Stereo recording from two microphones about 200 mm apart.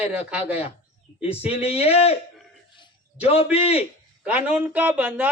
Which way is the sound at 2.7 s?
25° left (ahead or behind).